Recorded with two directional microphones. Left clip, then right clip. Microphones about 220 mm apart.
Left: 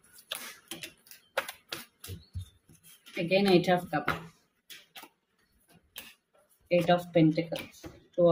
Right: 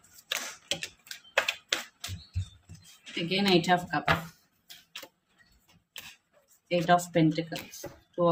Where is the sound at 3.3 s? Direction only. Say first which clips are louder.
Left 1 dB; 20° right (ahead or behind).